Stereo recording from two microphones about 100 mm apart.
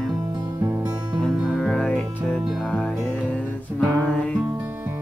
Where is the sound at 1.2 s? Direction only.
Centre (ahead or behind).